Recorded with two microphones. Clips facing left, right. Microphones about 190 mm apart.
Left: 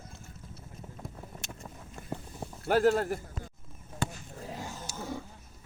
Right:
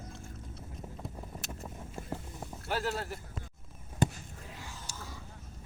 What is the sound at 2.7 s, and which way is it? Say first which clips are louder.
Speech: left 10 dB; 50° left (ahead or behind).